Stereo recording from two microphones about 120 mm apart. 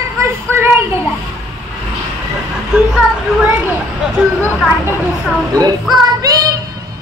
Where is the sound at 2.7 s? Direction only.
10° right (ahead or behind).